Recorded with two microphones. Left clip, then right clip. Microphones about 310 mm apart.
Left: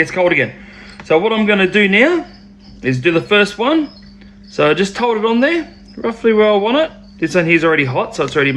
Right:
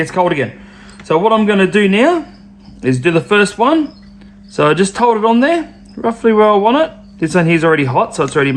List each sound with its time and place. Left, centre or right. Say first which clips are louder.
0.1 s speech: even; centre